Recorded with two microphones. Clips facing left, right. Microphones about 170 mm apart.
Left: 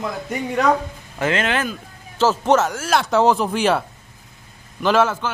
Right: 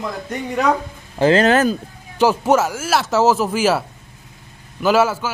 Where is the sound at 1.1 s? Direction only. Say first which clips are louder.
Right 7 dB; 35° right (ahead or behind).